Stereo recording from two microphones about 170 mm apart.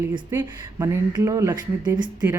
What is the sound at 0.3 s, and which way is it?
Speech, 15° right (ahead or behind).